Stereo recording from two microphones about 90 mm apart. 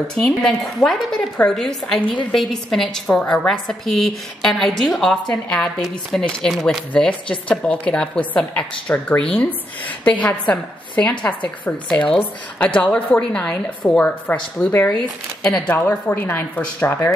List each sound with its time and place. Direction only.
0.1 s a woman's voice: 5° left (ahead or behind)
6.9 s a woman's voice: 15° left (ahead or behind)